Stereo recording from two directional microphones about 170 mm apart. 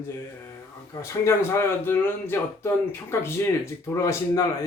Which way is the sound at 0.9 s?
15° left (ahead or behind).